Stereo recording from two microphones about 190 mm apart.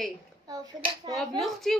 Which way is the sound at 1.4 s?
Centre (ahead or behind).